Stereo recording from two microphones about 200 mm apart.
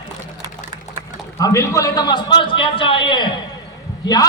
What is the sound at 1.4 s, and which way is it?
A man's voice, 15° left (ahead or behind).